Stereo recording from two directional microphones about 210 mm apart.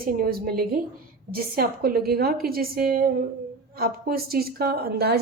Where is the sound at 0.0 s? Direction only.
45° right (ahead or behind).